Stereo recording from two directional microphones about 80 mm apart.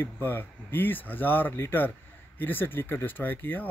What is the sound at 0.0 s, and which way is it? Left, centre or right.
Speech, left.